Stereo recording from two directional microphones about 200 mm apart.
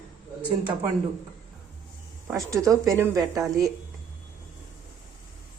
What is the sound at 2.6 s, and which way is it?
Speech, 15° right (ahead or behind).